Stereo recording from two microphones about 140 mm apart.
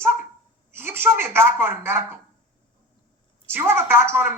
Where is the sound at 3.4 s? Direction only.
15° right (ahead or behind).